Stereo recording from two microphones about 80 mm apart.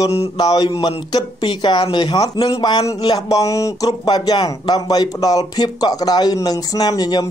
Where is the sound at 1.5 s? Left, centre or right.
Left.